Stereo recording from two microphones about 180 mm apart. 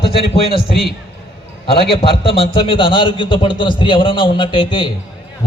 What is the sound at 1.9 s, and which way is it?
A man's voice, 30° left (ahead or behind).